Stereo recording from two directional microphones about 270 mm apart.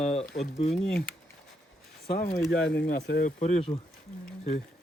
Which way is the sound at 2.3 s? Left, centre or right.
Centre.